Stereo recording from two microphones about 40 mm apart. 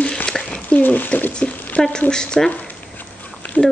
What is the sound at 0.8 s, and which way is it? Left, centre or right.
Speech, left.